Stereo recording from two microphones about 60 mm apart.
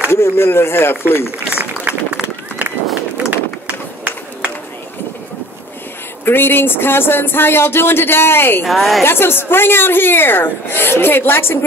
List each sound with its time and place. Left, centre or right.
0.1 s speech: left
1.5 s run: right
3.3 s run: right
6.2 s speech: left
8.6 s a woman's voice: centre
9.0 s speech: left